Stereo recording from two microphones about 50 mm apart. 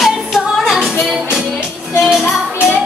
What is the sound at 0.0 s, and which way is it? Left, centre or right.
Music, centre.